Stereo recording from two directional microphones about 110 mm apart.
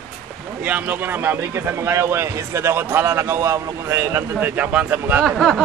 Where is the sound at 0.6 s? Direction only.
15° right (ahead or behind).